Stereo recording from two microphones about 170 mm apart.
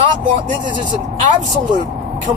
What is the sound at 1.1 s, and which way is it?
Speech, 50° right (ahead or behind).